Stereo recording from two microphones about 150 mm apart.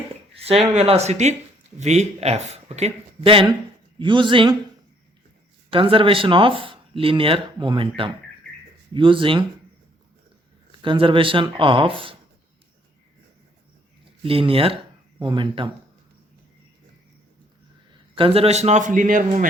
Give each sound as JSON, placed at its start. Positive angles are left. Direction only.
{"t": 0.3, "sound": "a sound", "side_deg": -40}
{"t": 0.8, "sound": "speech", "side_deg": -45}
{"t": 5.7, "sound": "speech", "side_deg": -35}
{"t": 10.7, "sound": "speech", "side_deg": -35}
{"t": 14.3, "sound": "speech", "side_deg": -40}
{"t": 18.1, "sound": "speech", "side_deg": -35}